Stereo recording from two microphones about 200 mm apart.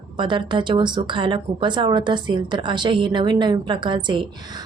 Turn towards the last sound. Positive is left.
turn(degrees=-25)  # may be behind; listen again after turning